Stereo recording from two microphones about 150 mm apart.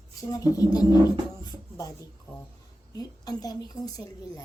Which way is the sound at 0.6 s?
25° left (ahead or behind).